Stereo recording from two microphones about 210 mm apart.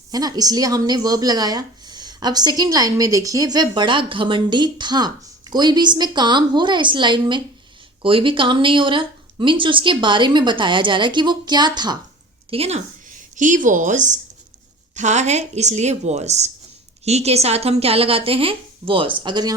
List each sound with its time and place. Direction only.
0.1 s a woman's voice: 20° right (ahead or behind)